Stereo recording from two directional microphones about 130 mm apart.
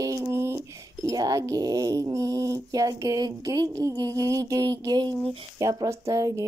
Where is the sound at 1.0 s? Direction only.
30° right (ahead or behind).